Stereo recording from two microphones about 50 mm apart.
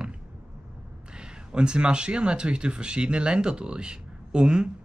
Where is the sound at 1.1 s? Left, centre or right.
Centre.